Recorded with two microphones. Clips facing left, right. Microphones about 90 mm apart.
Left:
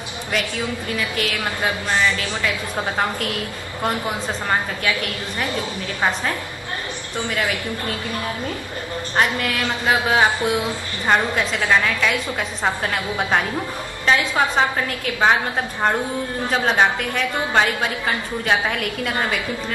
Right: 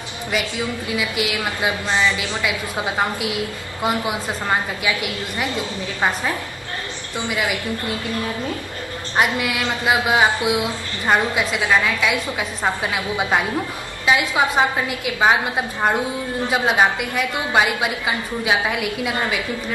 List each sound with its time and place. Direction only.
0.9 s a woman's voice: 10° right (ahead or behind)
9.1 s a woman's voice: 15° right (ahead or behind)